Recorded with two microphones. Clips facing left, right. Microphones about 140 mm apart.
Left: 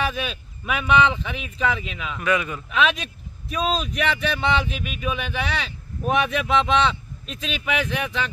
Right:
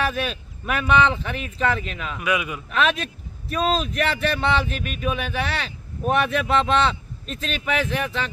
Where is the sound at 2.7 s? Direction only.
Centre (ahead or behind).